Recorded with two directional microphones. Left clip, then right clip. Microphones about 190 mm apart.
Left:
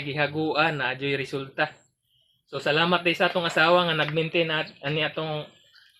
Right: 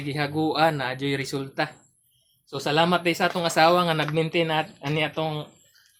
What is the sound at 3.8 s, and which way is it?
Speech, 35° right (ahead or behind).